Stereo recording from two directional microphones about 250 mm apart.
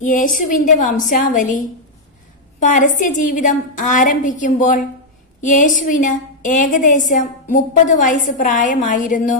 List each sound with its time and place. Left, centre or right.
0.0 s a woman's voice: left